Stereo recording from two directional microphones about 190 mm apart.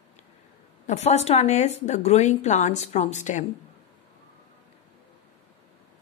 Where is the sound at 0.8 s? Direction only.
35° left (ahead or behind).